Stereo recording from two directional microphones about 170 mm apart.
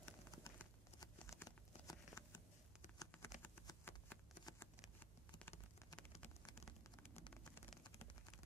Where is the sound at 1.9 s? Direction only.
15° left (ahead or behind).